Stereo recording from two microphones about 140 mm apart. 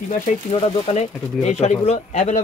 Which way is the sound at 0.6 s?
50° left (ahead or behind).